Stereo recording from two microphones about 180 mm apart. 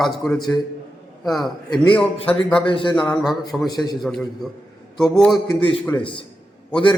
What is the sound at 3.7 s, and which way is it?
Speech, 20° left (ahead or behind).